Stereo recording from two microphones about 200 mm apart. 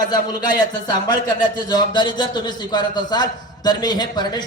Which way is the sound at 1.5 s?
20° left (ahead or behind).